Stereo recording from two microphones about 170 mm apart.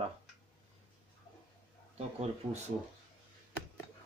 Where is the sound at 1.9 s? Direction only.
40° right (ahead or behind).